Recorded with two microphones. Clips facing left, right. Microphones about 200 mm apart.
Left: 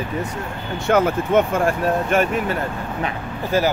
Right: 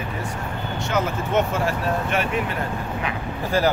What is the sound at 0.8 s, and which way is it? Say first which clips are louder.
Speech: left 8 dB; 55° left (ahead or behind).